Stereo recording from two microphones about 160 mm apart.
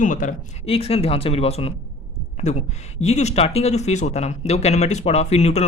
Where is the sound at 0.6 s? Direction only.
35° left (ahead or behind).